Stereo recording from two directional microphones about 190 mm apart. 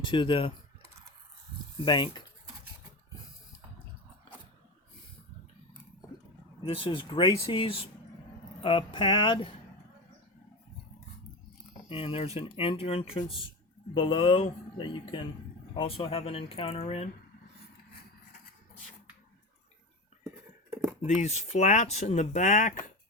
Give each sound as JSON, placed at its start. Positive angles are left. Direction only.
{"t": 0.0, "sound": "speech", "side_deg": 25}
{"t": 1.8, "sound": "speech", "side_deg": 25}
{"t": 6.7, "sound": "speech", "side_deg": 30}
{"t": 11.9, "sound": "speech", "side_deg": 30}
{"t": 20.7, "sound": "cutlery", "side_deg": -15}
{"t": 21.2, "sound": "speech", "side_deg": 35}